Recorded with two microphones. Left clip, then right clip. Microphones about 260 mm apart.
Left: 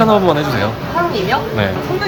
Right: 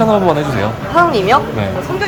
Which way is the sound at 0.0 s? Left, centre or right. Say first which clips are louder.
Even; centre.